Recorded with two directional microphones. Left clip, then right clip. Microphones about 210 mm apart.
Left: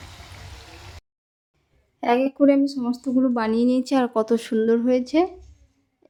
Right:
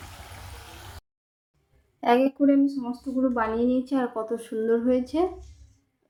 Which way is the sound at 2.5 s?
50° left (ahead or behind).